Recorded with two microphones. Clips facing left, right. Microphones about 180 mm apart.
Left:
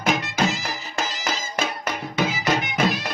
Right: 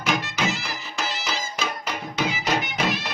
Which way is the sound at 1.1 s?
50° left (ahead or behind).